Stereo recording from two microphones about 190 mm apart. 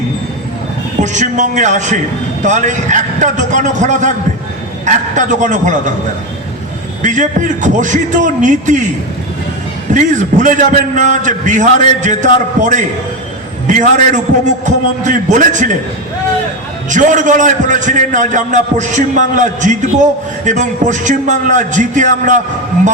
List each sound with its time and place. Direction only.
1.0 s a man's voice: 40° right (ahead or behind)
7.0 s a man's voice: 40° right (ahead or behind)
9.9 s a man's voice: 40° right (ahead or behind)
16.9 s a man's voice: 40° right (ahead or behind)